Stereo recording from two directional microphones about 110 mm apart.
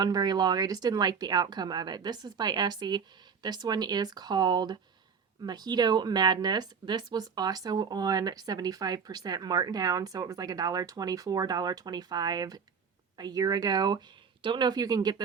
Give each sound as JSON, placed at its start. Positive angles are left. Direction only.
{"t": 0.0, "sound": "speech", "side_deg": -40}